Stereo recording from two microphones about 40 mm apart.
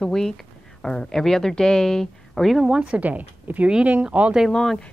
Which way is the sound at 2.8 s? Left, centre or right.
Right.